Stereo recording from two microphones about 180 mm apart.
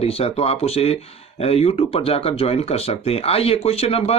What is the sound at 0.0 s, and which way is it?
Speech, 35° left (ahead or behind).